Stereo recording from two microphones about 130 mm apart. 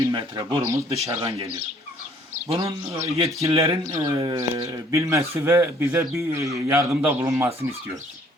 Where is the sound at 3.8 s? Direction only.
25° right (ahead or behind).